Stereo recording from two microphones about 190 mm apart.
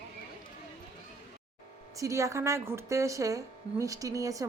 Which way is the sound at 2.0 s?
15° right (ahead or behind).